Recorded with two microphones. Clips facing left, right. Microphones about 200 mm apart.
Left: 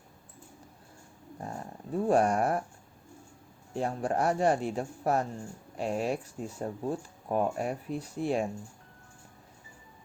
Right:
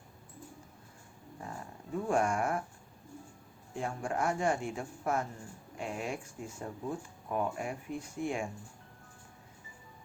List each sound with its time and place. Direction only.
1.4 s dog: 35° left (ahead or behind)
3.8 s speech: 35° left (ahead or behind)